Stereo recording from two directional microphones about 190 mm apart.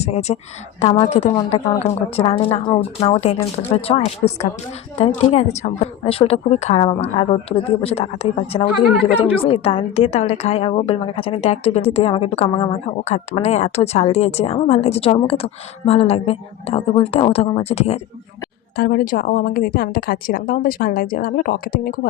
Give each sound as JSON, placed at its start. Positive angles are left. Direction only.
{"t": 0.0, "sound": "a woman's voice", "side_deg": 35}
{"t": 18.8, "sound": "a woman's voice", "side_deg": 50}